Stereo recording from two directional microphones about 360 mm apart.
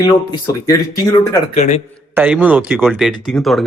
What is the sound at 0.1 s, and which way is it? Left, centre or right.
Speech, centre.